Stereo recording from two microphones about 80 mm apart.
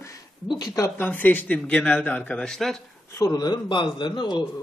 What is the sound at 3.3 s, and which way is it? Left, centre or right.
A man's voice, left.